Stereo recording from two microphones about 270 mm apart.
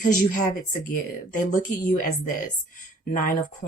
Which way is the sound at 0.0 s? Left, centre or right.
Left.